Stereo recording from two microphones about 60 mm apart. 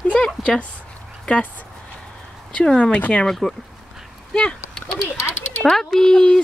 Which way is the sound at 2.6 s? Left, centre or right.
Centre.